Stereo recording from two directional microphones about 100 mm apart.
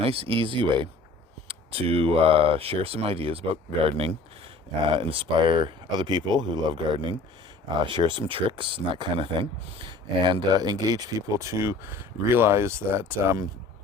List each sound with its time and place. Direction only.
0.0 s speech: 70° right (ahead or behind); by 0.9 s 55° right (ahead or behind)
1.5 s speech: 75° right (ahead or behind)
4.9 s speech: 65° right (ahead or behind); by 13.5 s 30° right (ahead or behind)